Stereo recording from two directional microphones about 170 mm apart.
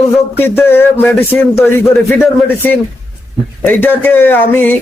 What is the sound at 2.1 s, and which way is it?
Speech, 15° left (ahead or behind).